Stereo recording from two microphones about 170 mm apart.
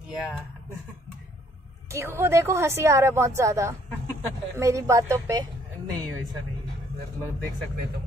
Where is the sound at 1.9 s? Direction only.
15° right (ahead or behind).